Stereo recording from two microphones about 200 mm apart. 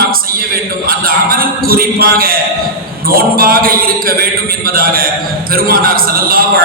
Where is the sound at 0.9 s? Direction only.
45° right (ahead or behind).